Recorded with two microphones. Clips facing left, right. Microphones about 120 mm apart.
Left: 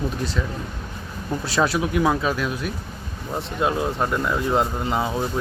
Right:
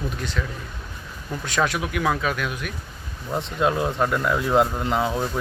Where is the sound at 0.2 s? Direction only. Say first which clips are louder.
Left 3 dB; 35° left (ahead or behind).